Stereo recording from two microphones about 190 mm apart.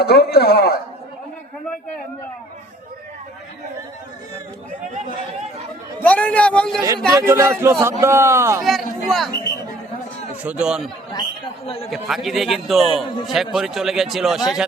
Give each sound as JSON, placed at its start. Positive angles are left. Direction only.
{"t": 0.0, "sound": "a man's voice", "side_deg": 60}
{"t": 6.0, "sound": "a man's voice", "side_deg": 10}
{"t": 7.2, "sound": "a man's voice", "side_deg": -15}
{"t": 8.6, "sound": "speech", "side_deg": 0}
{"t": 10.4, "sound": "a man's voice", "side_deg": -5}
{"t": 11.1, "sound": "a man's voice", "side_deg": 25}
{"t": 11.9, "sound": "a man's voice", "side_deg": 0}